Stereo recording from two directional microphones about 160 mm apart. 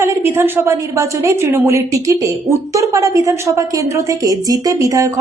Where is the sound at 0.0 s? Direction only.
15° right (ahead or behind).